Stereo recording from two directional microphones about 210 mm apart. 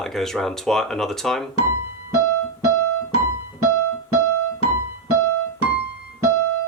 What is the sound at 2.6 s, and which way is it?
Keyboard, 90° right.